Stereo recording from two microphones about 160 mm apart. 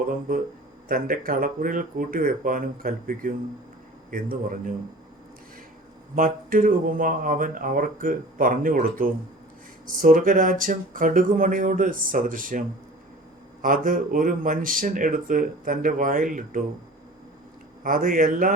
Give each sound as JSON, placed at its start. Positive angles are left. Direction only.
{"t": 0.1, "sound": "speech", "side_deg": -60}
{"t": 6.1, "sound": "speech", "side_deg": -60}
{"t": 17.8, "sound": "speech", "side_deg": -60}